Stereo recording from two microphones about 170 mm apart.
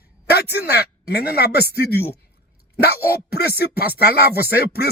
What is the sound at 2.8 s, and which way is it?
Speech, 70° left (ahead or behind).